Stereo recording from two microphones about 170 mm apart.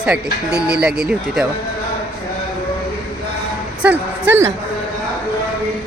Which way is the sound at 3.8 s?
15° right (ahead or behind).